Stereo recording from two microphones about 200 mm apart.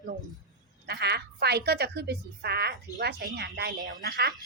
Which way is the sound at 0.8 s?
55° right (ahead or behind).